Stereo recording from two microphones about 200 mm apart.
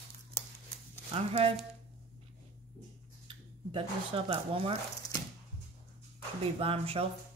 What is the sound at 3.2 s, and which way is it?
Speech, 25° right (ahead or behind).